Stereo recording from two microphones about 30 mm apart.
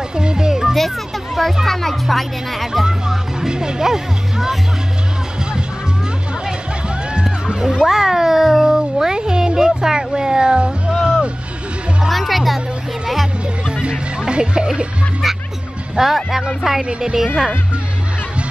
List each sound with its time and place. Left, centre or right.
0.1 s music: right
1.7 s speech: centre
2.7 s speech: centre
7.6 s a sound: centre
12.1 s music: centre
13.8 s music: right
15.2 s music: centre
16.3 s speech: centre